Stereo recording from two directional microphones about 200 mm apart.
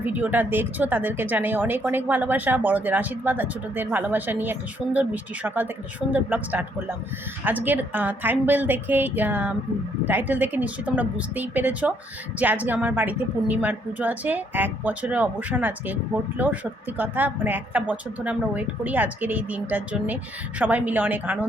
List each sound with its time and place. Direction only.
0.0 s speech: 10° right (ahead or behind)
17.0 s speech: 10° right (ahead or behind)